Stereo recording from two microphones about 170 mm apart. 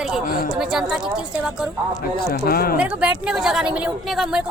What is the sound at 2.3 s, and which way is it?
Speech, 60° left (ahead or behind).